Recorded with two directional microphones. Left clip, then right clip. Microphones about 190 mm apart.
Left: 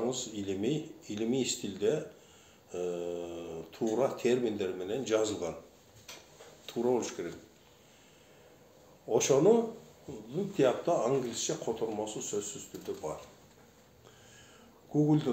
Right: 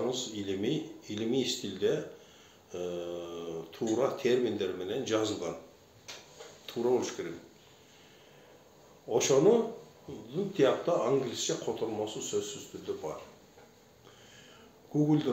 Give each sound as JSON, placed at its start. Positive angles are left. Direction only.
{"t": 0.1, "sound": "speech", "side_deg": 45}
{"t": 6.6, "sound": "speech", "side_deg": 45}
{"t": 9.1, "sound": "speech", "side_deg": 45}
{"t": 15.0, "sound": "speech", "side_deg": 45}